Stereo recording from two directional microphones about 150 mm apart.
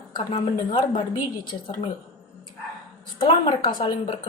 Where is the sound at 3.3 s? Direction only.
35° left (ahead or behind).